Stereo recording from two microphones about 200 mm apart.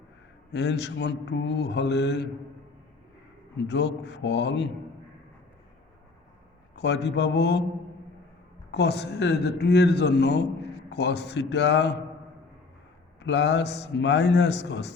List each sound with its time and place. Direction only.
0.5 s a man's voice: 60° left (ahead or behind)
3.7 s a man's voice: 60° left (ahead or behind)
6.7 s a man's voice: 60° left (ahead or behind)
8.7 s a man's voice: 55° left (ahead or behind)
13.2 s a man's voice: 60° left (ahead or behind)